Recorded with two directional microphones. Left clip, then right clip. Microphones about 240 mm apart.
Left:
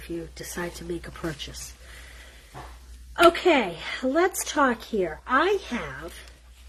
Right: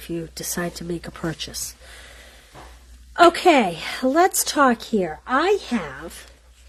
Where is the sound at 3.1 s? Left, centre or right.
Right.